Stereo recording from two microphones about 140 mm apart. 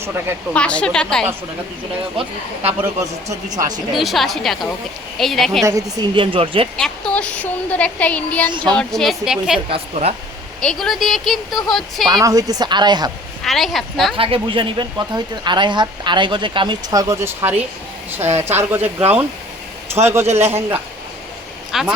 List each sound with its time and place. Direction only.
0.0 s a man's voice: 15° right (ahead or behind)
0.5 s speech: 10° left (ahead or behind)
2.8 s a woman's voice: 25° right (ahead or behind)
3.9 s speech: centre (ahead or behind)
5.6 s a woman's voice: 25° right (ahead or behind)
6.1 s speech: 40° right (ahead or behind)
6.7 s speech: 5° left (ahead or behind)
9.6 s a woman's voice: 45° right (ahead or behind)
10.6 s speech: 5° left (ahead or behind)
12.0 s a woman's voice: 25° right (ahead or behind)
13.4 s speech: centre (ahead or behind)
14.2 s a man's voice: 40° right (ahead or behind); by 18.8 s 15° right (ahead or behind)
19.9 s a woman's voice: 20° right (ahead or behind)
21.7 s speech: centre (ahead or behind)